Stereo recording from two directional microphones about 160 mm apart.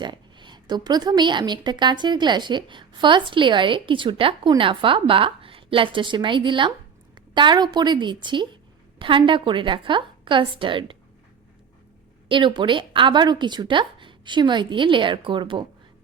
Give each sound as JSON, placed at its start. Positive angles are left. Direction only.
{"t": 0.0, "sound": "a woman's voice", "side_deg": -30}
{"t": 12.3, "sound": "a woman's voice", "side_deg": -30}